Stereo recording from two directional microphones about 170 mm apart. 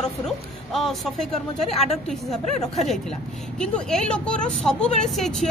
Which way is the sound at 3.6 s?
5° left (ahead or behind).